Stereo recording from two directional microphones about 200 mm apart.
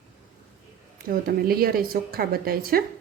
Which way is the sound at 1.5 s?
50° right (ahead or behind).